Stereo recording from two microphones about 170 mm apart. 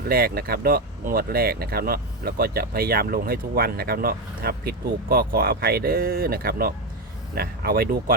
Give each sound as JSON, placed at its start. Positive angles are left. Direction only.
{"t": 0.1, "sound": "speech", "side_deg": -65}